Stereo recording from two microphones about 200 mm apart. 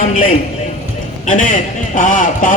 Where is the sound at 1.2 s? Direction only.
40° left (ahead or behind).